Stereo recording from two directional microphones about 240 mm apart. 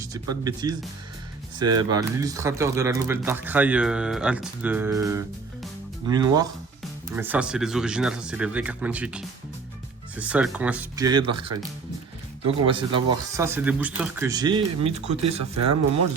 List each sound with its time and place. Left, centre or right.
0.0 s speech: centre
12.5 s speech: right
15.2 s speech: right